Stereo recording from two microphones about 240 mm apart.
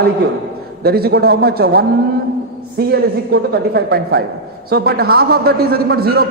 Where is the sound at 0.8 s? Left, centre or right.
Right.